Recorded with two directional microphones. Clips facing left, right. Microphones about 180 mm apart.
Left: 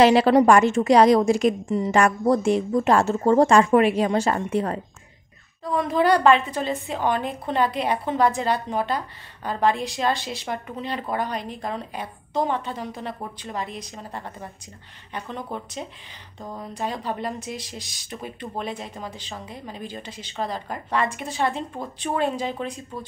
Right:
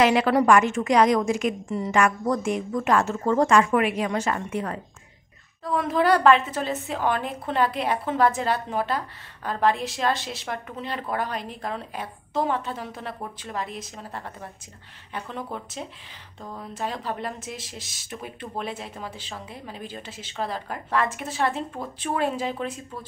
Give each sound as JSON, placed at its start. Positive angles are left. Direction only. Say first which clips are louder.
{"t": 0.0, "sound": "a woman's voice", "louder": "left 4 dB", "side_deg": 30}
{"t": 5.6, "sound": "a woman's voice", "louder": "left 1 dB", "side_deg": 0}